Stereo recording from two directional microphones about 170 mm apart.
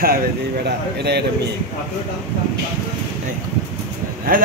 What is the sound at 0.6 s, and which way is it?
Speech, 75° right (ahead or behind).